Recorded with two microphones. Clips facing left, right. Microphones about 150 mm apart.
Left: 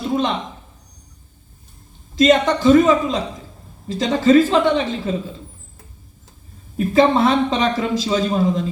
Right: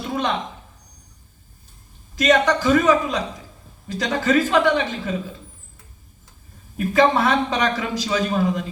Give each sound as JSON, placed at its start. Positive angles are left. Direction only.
{"t": 2.1, "sound": "a man's voice", "side_deg": 25}
{"t": 6.7, "sound": "a man's voice", "side_deg": 25}